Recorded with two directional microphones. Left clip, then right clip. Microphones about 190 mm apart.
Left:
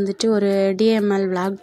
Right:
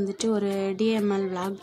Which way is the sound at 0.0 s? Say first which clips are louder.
Left 7 dB; 20° left (ahead or behind).